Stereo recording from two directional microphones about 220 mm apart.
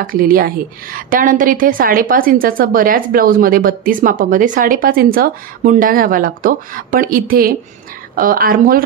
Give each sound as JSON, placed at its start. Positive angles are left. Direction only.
{"t": 0.0, "sound": "a woman's voice", "side_deg": -40}